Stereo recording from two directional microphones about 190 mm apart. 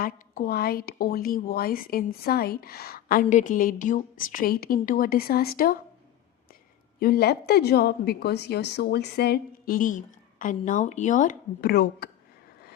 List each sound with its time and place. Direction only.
0.0 s a woman's voice: 50° left (ahead or behind)
7.0 s a woman's voice: 55° left (ahead or behind)